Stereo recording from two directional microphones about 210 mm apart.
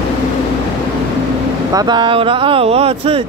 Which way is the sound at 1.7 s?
20° right (ahead or behind).